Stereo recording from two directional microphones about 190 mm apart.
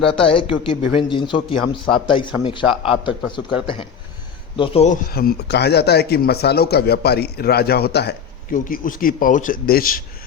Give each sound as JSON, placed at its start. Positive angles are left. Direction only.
{"t": 0.0, "sound": "speech", "side_deg": 30}
{"t": 5.1, "sound": "speech", "side_deg": 55}